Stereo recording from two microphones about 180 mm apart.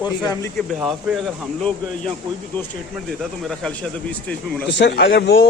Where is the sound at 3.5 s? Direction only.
5° left (ahead or behind).